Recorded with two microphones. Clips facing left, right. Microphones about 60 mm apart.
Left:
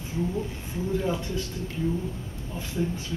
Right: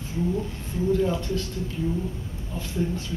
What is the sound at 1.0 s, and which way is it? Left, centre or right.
Speech, centre.